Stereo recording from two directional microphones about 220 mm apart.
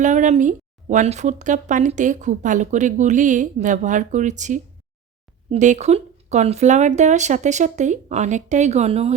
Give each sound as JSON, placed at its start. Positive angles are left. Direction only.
{"t": 0.0, "sound": "speech", "side_deg": -35}